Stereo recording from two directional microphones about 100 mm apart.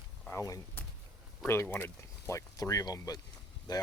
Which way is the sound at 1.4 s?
20° left (ahead or behind).